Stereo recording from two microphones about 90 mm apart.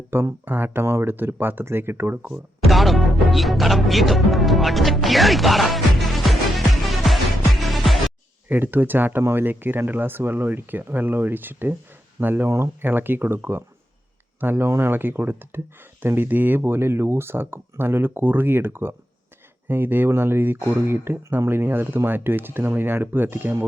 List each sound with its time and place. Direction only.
0.1 s speech: 25° right (ahead or behind)
2.6 s music: centre (ahead or behind)
8.4 s speech: 20° right (ahead or behind)
12.8 s speech: 25° right (ahead or behind)